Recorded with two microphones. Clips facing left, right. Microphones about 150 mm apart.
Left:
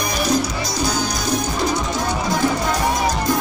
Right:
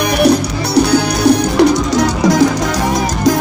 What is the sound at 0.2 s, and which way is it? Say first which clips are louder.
Music: right 8 dB; 70° right (ahead or behind).